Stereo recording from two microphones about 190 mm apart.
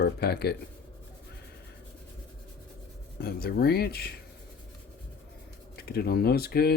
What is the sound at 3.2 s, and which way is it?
Speech, 55° left (ahead or behind).